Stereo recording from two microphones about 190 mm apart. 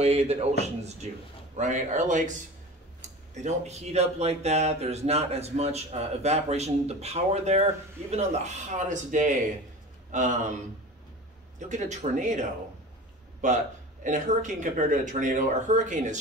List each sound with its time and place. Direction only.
0.0 s speech: 35° right (ahead or behind)
11.7 s speech: 40° right (ahead or behind)